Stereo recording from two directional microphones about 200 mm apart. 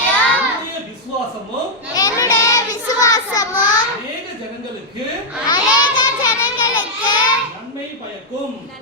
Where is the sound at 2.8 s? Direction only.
20° left (ahead or behind).